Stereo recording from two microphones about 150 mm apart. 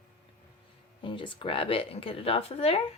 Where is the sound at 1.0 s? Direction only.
35° left (ahead or behind).